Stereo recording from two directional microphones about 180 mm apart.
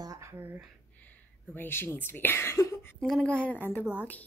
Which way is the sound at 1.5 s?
10° left (ahead or behind).